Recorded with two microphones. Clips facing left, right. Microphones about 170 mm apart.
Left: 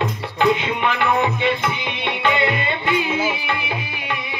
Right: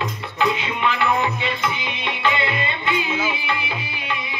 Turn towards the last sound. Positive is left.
turn(degrees=55)  # may be behind; listen again after turning